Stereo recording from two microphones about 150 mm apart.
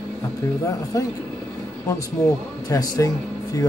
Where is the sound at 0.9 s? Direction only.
25° left (ahead or behind).